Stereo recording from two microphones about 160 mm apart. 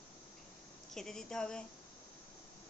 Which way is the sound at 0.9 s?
5° left (ahead or behind).